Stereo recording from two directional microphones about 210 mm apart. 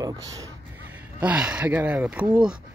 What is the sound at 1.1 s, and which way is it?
Speech, 5° right (ahead or behind).